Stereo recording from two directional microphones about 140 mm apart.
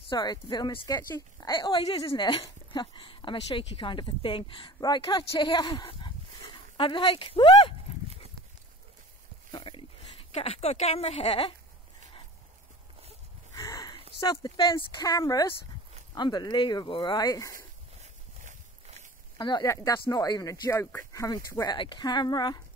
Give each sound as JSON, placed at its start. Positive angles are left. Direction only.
{"t": 0.1, "sound": "a woman's voice", "side_deg": 30}
{"t": 0.8, "sound": "speech", "side_deg": 20}
{"t": 1.6, "sound": "a woman's voice", "side_deg": 35}
{"t": 9.5, "sound": "speech", "side_deg": 35}
{"t": 13.6, "sound": "a sound", "side_deg": 30}
{"t": 14.2, "sound": "a woman's voice", "side_deg": 30}
{"t": 18.0, "sound": "walk", "side_deg": -60}
{"t": 19.3, "sound": "a woman's voice", "side_deg": 30}